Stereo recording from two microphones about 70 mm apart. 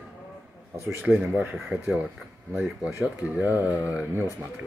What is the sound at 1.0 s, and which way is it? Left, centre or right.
Speech, centre.